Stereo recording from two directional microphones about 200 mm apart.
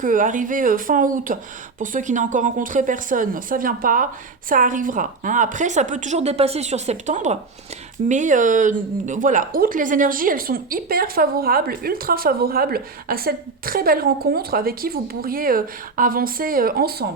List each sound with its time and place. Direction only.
0.0 s a woman's voice: 40° right (ahead or behind)